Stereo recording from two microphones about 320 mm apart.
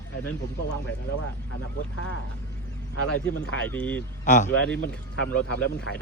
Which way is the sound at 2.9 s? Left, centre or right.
Left.